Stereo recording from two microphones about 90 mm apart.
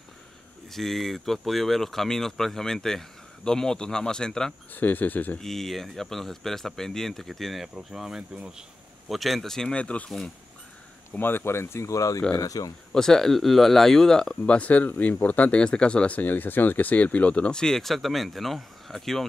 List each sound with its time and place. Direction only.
0.7 s speech: 5° left (ahead or behind)
4.7 s speech: 20° left (ahead or behind)
5.4 s speech: 5° left (ahead or behind)
11.1 s speech: 25° left (ahead or behind); by 12.7 s 40° left (ahead or behind)
12.9 s speech: 5° left (ahead or behind)